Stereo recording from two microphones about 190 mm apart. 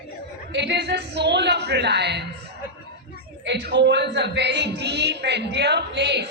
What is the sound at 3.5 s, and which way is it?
A woman's voice, 70° right (ahead or behind).